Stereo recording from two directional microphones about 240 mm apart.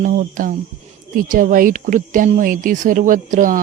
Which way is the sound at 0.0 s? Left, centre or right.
Right.